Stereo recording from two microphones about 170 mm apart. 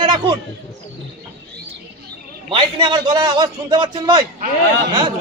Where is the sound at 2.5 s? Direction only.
30° right (ahead or behind).